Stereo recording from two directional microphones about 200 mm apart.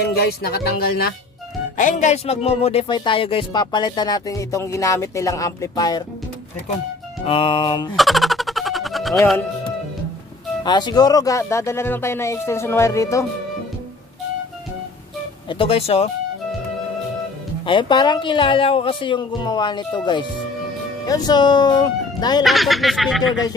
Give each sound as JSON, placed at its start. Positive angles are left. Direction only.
{"t": 0.0, "sound": "speech", "side_deg": 50}
{"t": 1.8, "sound": "speech", "side_deg": 40}
{"t": 7.2, "sound": "speech", "side_deg": 25}
{"t": 7.9, "sound": "a sound", "side_deg": 0}
{"t": 10.6, "sound": "speech", "side_deg": 20}
{"t": 15.4, "sound": "speech", "side_deg": 25}
{"t": 17.6, "sound": "speech", "side_deg": 25}
{"t": 22.4, "sound": "speech", "side_deg": 0}